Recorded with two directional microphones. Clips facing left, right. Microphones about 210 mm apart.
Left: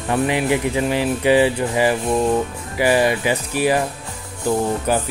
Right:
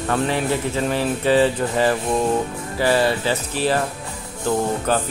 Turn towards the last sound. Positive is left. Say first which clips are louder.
# left 1 dB
turn(degrees=10)  # may be behind; listen again after turning